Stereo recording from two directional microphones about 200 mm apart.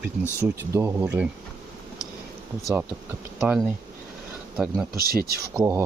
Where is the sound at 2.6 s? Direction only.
15° right (ahead or behind).